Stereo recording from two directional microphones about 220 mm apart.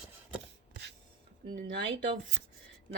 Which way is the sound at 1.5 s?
40° right (ahead or behind).